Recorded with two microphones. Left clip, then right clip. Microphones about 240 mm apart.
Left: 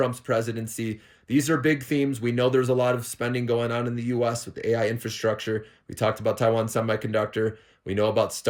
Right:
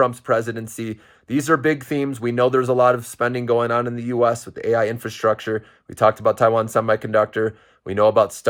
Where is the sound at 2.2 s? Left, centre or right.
Right.